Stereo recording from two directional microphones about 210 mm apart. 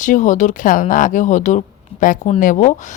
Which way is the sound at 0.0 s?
35° left (ahead or behind).